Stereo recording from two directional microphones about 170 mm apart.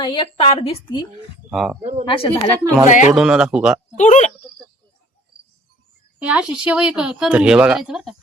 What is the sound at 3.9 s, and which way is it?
Speech, 45° left (ahead or behind).